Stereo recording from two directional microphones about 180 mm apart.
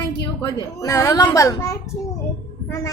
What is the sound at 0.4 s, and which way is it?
A child's voice, 15° left (ahead or behind).